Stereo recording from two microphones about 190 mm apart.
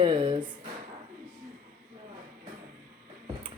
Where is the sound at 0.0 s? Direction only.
25° right (ahead or behind).